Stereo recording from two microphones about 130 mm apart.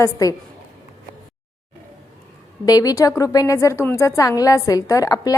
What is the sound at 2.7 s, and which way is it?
A woman's voice, 30° left (ahead or behind).